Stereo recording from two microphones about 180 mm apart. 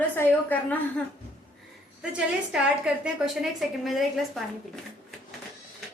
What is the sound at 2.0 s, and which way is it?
A woman's voice, 5° right (ahead or behind).